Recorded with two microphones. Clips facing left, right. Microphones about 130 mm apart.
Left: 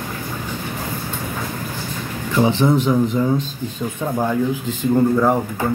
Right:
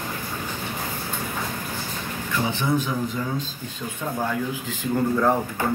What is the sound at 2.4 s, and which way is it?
Speech, 50° left (ahead or behind).